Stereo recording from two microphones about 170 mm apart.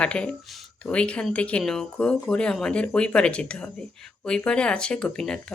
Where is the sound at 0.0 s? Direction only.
5° left (ahead or behind).